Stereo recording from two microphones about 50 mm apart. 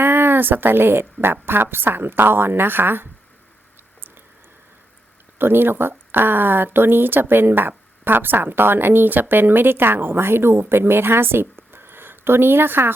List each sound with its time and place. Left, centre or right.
0.0 s a woman's voice: right
5.4 s a woman's voice: right